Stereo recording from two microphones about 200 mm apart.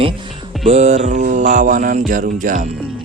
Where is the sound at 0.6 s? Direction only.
30° right (ahead or behind).